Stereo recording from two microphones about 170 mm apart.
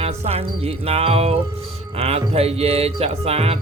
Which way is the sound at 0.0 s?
35° right (ahead or behind).